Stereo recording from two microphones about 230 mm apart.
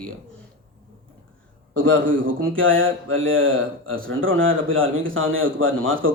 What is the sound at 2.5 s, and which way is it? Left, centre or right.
Speech, right.